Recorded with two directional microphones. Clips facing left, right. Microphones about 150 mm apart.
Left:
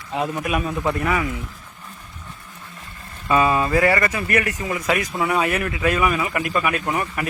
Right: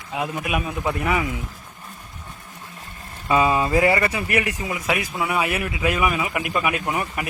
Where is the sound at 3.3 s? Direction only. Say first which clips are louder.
Left 1 dB; 15° right (ahead or behind).